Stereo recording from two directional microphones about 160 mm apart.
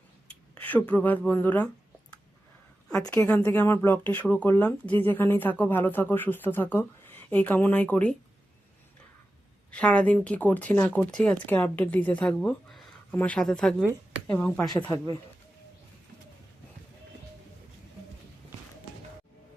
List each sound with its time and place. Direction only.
0.5 s speech: 10° left (ahead or behind)
3.1 s speech: 10° left (ahead or behind)
9.7 s a woman's voice: 5° left (ahead or behind)
14.8 s speech: 15° left (ahead or behind)